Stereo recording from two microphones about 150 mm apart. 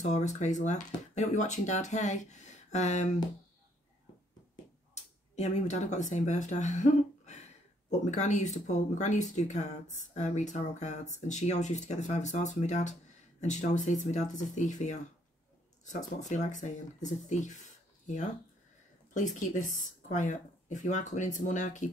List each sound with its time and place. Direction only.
0.0 s speech: 55° left (ahead or behind)
5.3 s speech: 50° left (ahead or behind)